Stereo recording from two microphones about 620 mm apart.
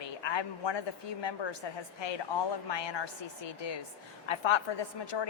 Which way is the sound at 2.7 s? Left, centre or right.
Left.